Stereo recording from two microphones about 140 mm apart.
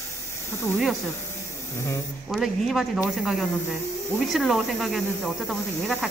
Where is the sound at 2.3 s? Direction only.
Centre (ahead or behind).